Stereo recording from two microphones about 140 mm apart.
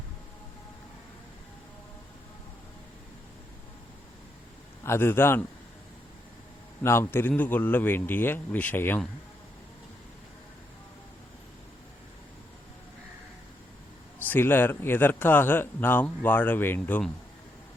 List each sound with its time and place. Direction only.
4.8 s speech: 15° left (ahead or behind)
6.8 s speech: 15° left (ahead or behind)
14.2 s speech: 15° left (ahead or behind)